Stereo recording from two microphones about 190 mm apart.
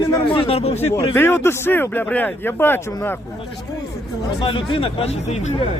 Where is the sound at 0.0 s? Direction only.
25° left (ahead or behind).